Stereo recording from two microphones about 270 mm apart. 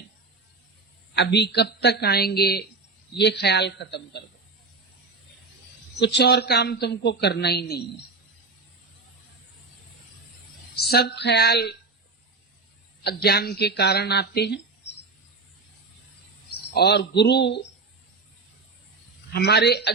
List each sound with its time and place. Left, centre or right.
1.1 s speech: left
6.0 s speech: left
10.8 s speech: left
13.1 s speech: left
16.7 s speech: left
19.3 s speech: left